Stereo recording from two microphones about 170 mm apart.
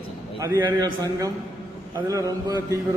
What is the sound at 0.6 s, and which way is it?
A man's voice, 20° right (ahead or behind).